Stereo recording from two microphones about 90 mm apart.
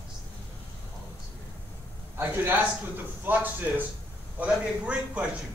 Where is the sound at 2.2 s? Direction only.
25° right (ahead or behind).